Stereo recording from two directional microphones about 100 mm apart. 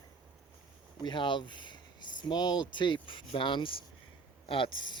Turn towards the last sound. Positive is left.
turn(degrees=55)  # may be behind; listen again after turning